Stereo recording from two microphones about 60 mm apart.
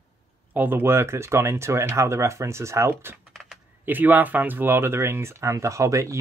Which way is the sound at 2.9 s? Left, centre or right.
Right.